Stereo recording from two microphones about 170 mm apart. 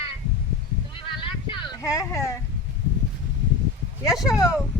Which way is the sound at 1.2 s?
30° left (ahead or behind).